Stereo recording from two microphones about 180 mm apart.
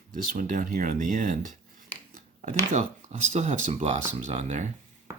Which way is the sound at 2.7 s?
40° right (ahead or behind).